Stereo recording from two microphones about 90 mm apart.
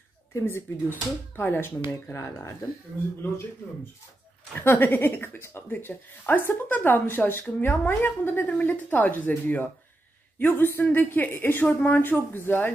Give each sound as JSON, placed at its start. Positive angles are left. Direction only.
{"t": 0.3, "sound": "speech", "side_deg": 30}
{"t": 4.6, "sound": "speech", "side_deg": 20}